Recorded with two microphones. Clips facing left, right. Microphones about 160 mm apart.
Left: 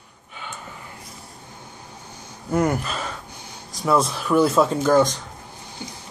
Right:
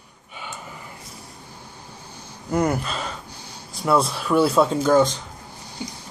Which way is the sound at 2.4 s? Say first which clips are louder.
Left 1 dB; centre (ahead or behind).